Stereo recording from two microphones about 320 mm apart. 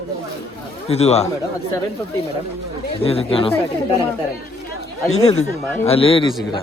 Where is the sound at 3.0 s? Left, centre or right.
Centre.